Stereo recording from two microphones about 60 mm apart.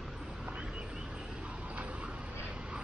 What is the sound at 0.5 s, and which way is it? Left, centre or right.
Vehicle, centre.